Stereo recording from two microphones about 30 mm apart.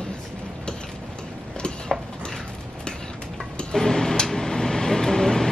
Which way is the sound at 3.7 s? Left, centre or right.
Centre.